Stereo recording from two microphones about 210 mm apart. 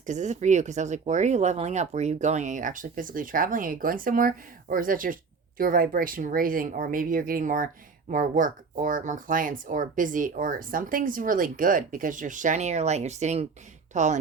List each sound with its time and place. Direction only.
0.0 s speech: 35° right (ahead or behind)